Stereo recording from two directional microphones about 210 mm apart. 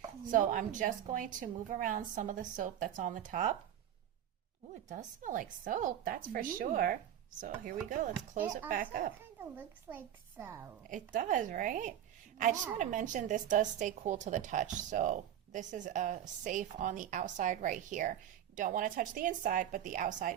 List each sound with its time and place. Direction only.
0.3 s a woman's voice: 40° right (ahead or behind)
4.7 s a woman's voice: 35° right (ahead or behind)
8.4 s a woman's voice: 10° right (ahead or behind)
8.7 s a woman's voice: 40° right (ahead or behind)
9.4 s a woman's voice: 10° right (ahead or behind)
10.8 s a woman's voice: 40° right (ahead or behind)